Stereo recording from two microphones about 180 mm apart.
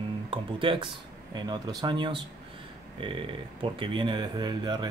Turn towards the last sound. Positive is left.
turn(degrees=-25)  # may be behind; listen again after turning